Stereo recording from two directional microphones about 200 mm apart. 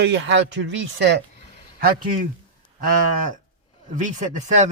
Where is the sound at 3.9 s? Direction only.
40° right (ahead or behind).